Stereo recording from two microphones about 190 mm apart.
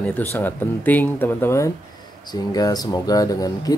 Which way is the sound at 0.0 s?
10° left (ahead or behind).